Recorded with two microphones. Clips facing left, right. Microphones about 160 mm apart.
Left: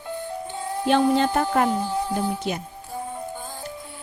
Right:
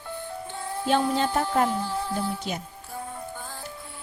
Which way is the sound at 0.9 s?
65° left (ahead or behind).